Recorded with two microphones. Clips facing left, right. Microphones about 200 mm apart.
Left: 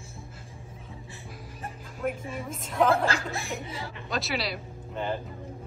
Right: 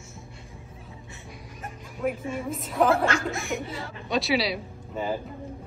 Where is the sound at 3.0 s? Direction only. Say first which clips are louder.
Right 3 dB; 35° left (ahead or behind).